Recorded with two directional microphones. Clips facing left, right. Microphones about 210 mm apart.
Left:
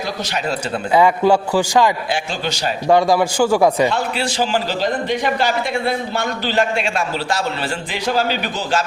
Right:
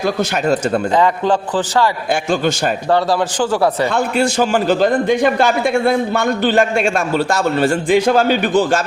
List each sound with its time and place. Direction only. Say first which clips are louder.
0.9 s a man's voice: left 5 dB; 10° left (ahead or behind)
2.9 s a man's voice: left 3 dB; 10° left (ahead or behind)
3.8 s a man's voice: right 4 dB; 50° right (ahead or behind)